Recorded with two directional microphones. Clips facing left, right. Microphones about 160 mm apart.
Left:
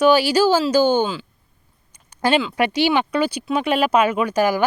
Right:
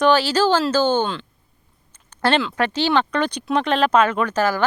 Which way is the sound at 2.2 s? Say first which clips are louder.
Left 1 dB; 10° left (ahead or behind).